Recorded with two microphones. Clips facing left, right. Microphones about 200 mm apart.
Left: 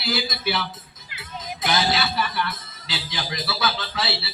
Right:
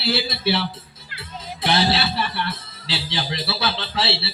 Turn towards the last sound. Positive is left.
turn(degrees=-30)  # may be behind; listen again after turning